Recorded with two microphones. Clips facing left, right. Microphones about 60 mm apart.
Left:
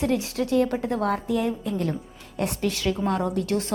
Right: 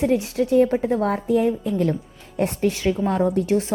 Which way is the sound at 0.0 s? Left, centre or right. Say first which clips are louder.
Right 4 dB; centre.